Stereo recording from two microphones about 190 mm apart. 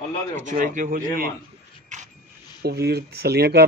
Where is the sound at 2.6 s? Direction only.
55° right (ahead or behind).